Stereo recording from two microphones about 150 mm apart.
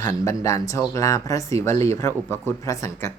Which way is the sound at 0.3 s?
20° left (ahead or behind).